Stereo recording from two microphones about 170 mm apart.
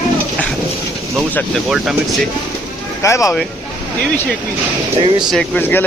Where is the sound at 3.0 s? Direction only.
20° left (ahead or behind).